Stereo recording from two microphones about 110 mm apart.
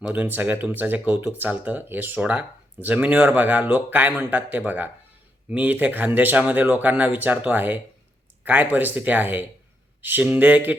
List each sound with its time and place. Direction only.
0.1 s speech: 15° right (ahead or behind)